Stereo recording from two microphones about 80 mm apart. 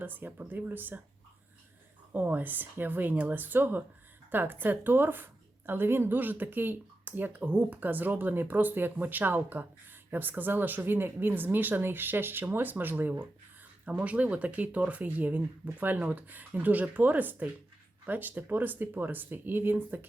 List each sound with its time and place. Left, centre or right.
0.0 s speech: right
2.1 s speech: right